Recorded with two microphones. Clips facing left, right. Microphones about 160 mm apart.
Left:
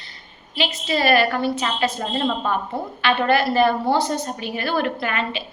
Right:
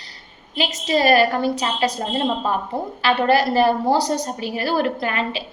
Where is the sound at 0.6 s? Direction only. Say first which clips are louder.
Right 3 dB; 40° right (ahead or behind).